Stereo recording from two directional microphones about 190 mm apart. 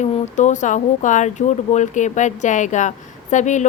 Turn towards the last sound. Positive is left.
turn(degrees=40)  # may be behind; listen again after turning